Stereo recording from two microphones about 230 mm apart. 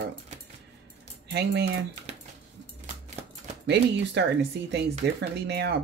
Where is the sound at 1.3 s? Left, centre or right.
Right.